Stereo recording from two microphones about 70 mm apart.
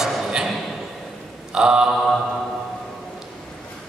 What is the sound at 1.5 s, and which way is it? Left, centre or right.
Speech, centre.